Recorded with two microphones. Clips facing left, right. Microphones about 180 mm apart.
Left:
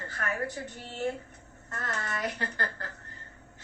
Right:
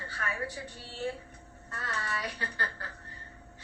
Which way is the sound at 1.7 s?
45° left (ahead or behind).